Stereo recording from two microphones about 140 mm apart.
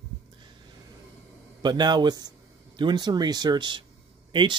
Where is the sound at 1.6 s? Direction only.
30° right (ahead or behind).